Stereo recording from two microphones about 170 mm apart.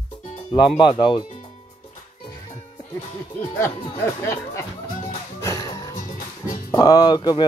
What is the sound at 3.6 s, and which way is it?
Speech, 15° left (ahead or behind).